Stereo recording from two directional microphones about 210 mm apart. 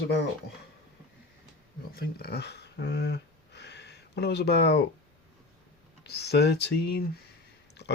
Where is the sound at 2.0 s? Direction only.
50° left (ahead or behind).